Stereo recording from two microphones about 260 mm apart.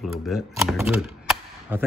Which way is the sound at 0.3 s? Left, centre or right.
Centre.